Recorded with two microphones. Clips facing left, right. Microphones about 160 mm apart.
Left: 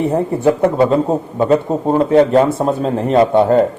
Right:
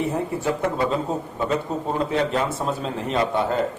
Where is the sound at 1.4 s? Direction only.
50° left (ahead or behind).